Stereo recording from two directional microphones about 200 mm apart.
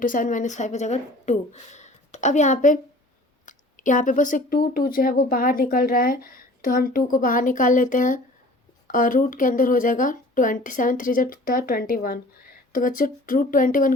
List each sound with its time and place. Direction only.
0.0 s a woman's voice: 40° left (ahead or behind)